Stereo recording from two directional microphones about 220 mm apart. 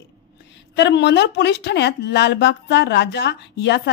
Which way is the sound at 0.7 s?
50° left (ahead or behind).